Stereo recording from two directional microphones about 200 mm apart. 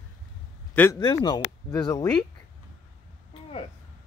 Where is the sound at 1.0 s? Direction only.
20° left (ahead or behind).